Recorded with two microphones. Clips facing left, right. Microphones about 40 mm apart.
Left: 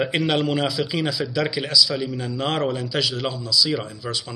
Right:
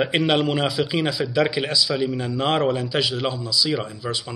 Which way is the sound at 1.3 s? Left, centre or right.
Right.